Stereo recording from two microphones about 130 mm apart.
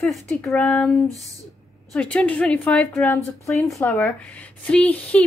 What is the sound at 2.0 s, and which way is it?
Speech, 10° left (ahead or behind).